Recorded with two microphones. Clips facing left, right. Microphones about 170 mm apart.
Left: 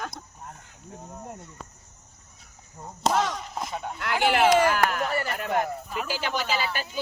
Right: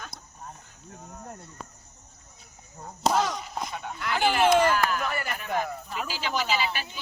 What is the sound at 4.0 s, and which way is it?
Speech, 65° left (ahead or behind).